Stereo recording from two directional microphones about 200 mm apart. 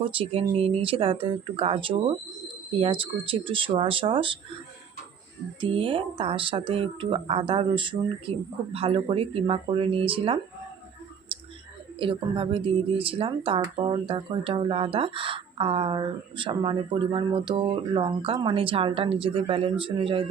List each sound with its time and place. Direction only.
0.0 s speech: 25° right (ahead or behind)
5.5 s speech: 25° right (ahead or behind)
11.3 s whispering: 25° right (ahead or behind)
11.9 s speech: 25° right (ahead or behind)